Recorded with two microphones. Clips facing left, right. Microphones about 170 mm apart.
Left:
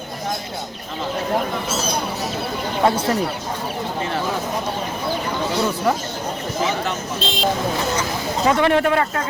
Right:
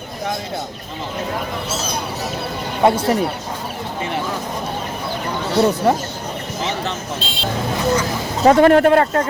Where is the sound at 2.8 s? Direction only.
20° right (ahead or behind).